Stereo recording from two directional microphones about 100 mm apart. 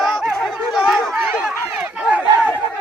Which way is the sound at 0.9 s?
5° right (ahead or behind).